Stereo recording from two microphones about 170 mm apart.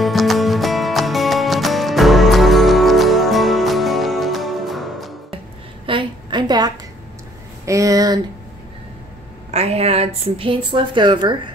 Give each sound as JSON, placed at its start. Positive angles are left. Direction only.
{"t": 0.0, "sound": "music", "side_deg": 0}
{"t": 5.9, "sound": "a sound", "side_deg": -30}
{"t": 9.5, "sound": "a woman's voice", "side_deg": -40}